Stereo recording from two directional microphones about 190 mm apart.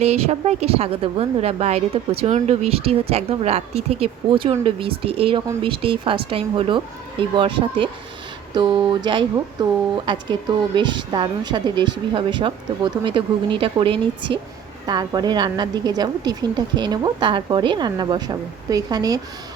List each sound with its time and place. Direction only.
0.0 s a woman's voice: 35° right (ahead or behind)